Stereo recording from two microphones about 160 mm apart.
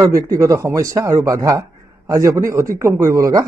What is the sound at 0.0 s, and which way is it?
A man's voice, 20° right (ahead or behind).